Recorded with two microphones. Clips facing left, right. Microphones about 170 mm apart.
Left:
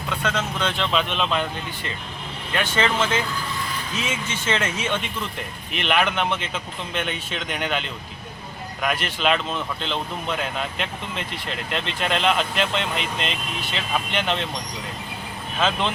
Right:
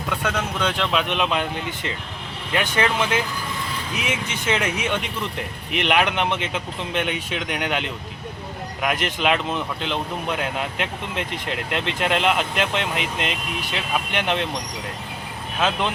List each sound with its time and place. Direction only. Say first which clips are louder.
0.2 s speech: left 1 dB; 10° right (ahead or behind)
15.5 s speech: even; 10° right (ahead or behind)